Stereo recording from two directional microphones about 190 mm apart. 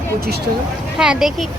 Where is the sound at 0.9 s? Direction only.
5° right (ahead or behind).